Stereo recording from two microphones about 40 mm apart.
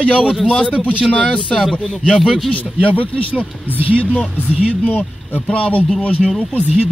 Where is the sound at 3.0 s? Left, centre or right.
Left.